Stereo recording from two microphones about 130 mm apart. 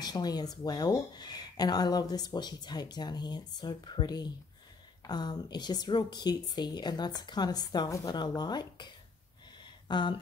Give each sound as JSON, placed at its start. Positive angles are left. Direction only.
{"t": 0.0, "sound": "speech", "side_deg": 30}